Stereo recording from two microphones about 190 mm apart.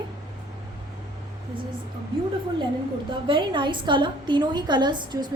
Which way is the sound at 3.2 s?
25° right (ahead or behind).